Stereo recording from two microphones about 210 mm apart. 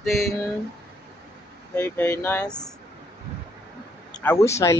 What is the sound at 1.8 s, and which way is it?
Speech, 10° left (ahead or behind).